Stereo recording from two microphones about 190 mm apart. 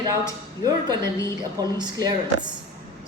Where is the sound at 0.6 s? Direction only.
20° right (ahead or behind).